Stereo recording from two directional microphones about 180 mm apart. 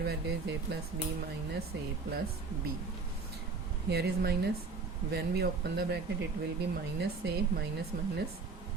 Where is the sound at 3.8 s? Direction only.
65° right (ahead or behind).